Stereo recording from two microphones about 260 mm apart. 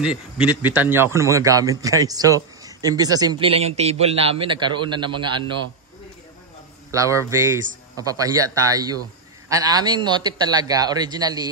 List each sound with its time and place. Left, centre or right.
0.0 s a man's voice: centre
6.9 s a man's voice: centre